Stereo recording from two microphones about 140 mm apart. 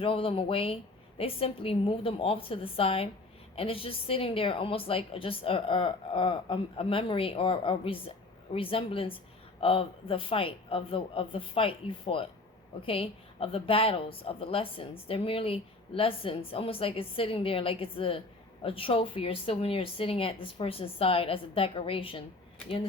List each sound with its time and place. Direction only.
0.0 s a woman's voice: 40° left (ahead or behind)